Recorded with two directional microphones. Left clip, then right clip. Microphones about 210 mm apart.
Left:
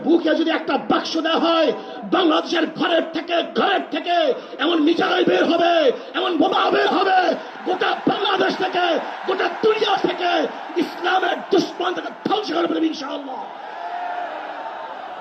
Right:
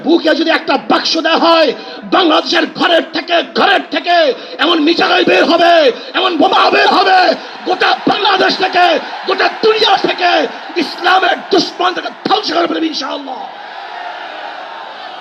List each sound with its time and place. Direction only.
0.1 s a man's voice: 25° right (ahead or behind)